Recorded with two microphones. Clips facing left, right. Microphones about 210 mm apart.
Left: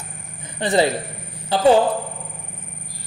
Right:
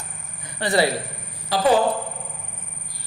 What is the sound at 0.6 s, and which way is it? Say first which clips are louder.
A man's voice: left 2 dB; 20° left (ahead or behind).